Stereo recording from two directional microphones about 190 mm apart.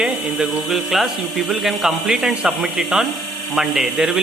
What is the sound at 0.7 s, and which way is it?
Speech, centre (ahead or behind).